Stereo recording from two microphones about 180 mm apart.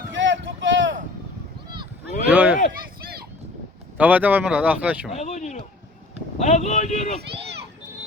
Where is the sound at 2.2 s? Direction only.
10° right (ahead or behind).